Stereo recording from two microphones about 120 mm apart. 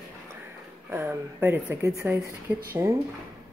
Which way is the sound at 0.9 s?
20° right (ahead or behind).